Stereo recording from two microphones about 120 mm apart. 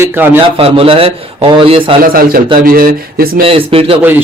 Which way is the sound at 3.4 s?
50° right (ahead or behind).